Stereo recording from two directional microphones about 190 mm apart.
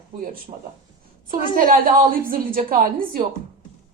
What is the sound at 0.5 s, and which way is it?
Speech, 35° right (ahead or behind).